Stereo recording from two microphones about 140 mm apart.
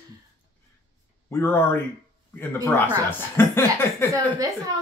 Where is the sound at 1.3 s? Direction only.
15° left (ahead or behind).